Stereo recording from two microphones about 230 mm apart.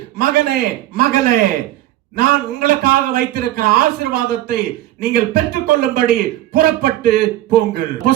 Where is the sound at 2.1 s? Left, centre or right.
Right.